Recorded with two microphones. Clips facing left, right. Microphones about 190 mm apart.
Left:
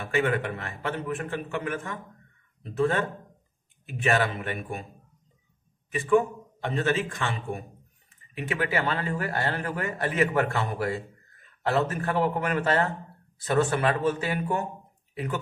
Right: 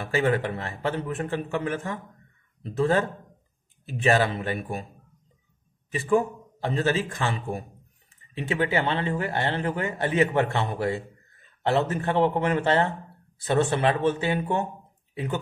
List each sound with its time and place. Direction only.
0.0 s a man's voice: 35° right (ahead or behind)
5.9 s a man's voice: 35° right (ahead or behind)